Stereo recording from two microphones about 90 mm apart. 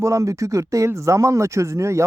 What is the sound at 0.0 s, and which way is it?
Speech, 35° right (ahead or behind).